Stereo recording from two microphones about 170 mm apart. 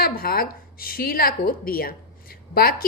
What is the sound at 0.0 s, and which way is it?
Speech, 60° left (ahead or behind).